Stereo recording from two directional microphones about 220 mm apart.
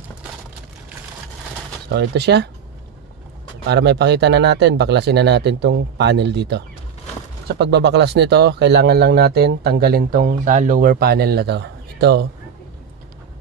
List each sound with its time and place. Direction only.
1.9 s speech: 50° right (ahead or behind)
3.6 s speech: 50° right (ahead or behind)